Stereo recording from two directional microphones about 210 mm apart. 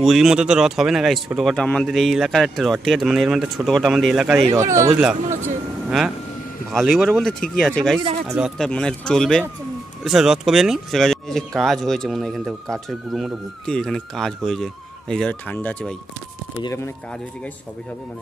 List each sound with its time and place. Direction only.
0.0 s speech: centre (ahead or behind)
4.5 s speech: 15° right (ahead or behind)
5.9 s speech: centre (ahead or behind); by 16.9 s 15° left (ahead or behind)